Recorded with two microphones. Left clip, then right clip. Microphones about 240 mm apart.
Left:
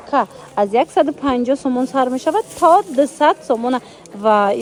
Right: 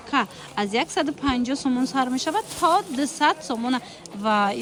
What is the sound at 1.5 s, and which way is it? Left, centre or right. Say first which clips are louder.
Speech: left 6 dB; right.